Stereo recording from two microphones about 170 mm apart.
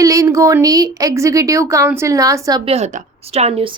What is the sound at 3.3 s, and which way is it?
Speech, 40° right (ahead or behind).